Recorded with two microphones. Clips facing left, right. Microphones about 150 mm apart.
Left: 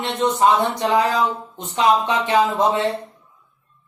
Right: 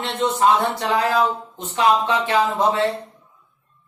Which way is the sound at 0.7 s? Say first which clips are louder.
Left 1 dB; 20° left (ahead or behind).